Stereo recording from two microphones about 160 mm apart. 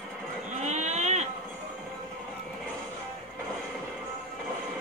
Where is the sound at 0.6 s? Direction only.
45° right (ahead or behind).